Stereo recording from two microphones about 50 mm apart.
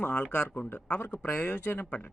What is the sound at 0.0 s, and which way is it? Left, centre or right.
Speech, left.